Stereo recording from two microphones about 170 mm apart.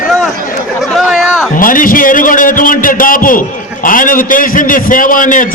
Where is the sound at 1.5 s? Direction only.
55° left (ahead or behind).